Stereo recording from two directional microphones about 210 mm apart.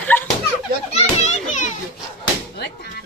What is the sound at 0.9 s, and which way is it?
Children playing, 35° left (ahead or behind).